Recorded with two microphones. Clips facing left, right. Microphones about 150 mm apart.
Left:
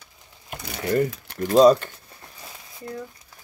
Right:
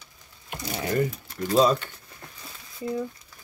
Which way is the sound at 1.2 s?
70° left (ahead or behind).